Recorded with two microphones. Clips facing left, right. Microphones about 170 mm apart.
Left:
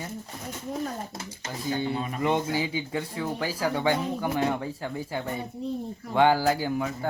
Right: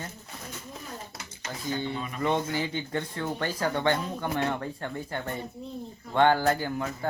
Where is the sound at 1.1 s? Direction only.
25° left (ahead or behind).